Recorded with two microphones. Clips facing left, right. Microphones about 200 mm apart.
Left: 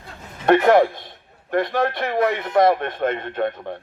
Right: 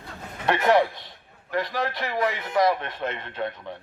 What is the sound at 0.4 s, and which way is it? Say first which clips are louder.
A man's voice: left 6 dB; 50° left (ahead or behind).